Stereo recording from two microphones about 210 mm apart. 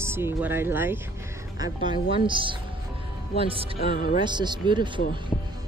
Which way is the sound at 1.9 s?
25° right (ahead or behind).